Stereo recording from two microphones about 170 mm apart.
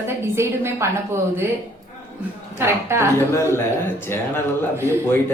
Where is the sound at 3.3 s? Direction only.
15° left (ahead or behind).